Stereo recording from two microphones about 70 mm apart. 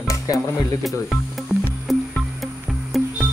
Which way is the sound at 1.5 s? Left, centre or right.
Left.